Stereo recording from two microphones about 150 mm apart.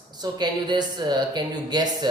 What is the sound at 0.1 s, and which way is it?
Speech, 30° right (ahead or behind).